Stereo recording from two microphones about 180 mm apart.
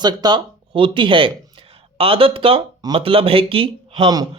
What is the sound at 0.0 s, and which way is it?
Speech, 25° right (ahead or behind).